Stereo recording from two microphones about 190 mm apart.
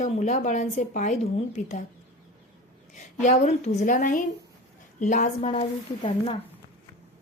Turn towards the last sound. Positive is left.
turn(degrees=30)  # may be behind; listen again after turning